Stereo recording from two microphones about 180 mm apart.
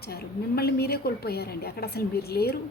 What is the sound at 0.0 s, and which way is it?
A woman's voice, 60° left (ahead or behind).